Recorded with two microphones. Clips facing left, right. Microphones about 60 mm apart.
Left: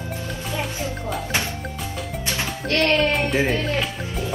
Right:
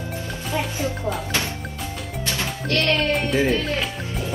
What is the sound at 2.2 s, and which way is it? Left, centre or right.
Music, left.